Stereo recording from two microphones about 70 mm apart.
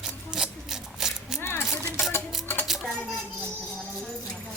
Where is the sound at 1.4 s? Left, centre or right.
Left.